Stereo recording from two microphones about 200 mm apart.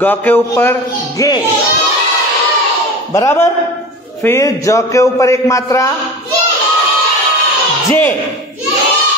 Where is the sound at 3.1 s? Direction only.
15° left (ahead or behind).